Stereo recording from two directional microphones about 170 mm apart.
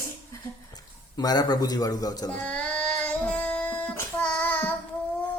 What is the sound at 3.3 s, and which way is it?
Child singing, 5° left (ahead or behind).